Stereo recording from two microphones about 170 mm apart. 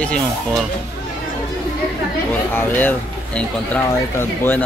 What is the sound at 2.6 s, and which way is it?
Speech, 10° left (ahead or behind).